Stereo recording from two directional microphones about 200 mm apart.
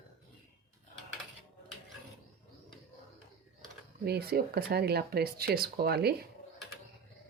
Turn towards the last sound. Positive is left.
turn(degrees=-55)  # may be behind; listen again after turning